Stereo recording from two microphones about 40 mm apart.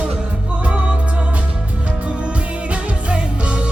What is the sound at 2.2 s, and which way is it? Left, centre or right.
Music, right.